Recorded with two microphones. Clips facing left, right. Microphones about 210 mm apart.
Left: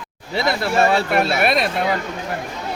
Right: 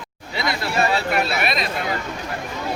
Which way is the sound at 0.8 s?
50° left (ahead or behind).